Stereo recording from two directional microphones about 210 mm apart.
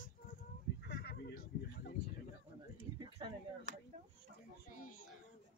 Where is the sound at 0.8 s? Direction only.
50° left (ahead or behind).